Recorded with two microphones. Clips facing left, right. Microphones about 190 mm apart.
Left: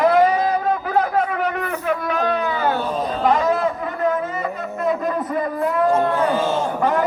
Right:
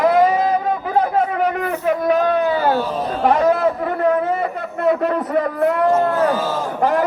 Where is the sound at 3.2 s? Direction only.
60° right (ahead or behind).